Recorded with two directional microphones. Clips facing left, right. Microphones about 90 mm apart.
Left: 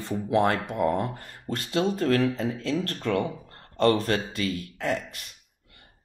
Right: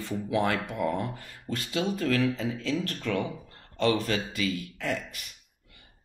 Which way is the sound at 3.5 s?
50° left (ahead or behind).